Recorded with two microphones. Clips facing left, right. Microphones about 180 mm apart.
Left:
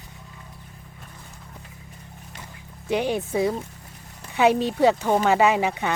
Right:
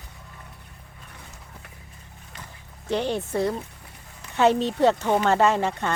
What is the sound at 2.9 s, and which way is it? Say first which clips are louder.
Speech: left 2 dB; 10° left (ahead or behind).